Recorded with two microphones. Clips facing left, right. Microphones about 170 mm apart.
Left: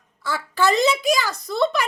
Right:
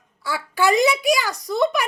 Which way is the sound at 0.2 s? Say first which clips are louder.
Even; 10° right (ahead or behind).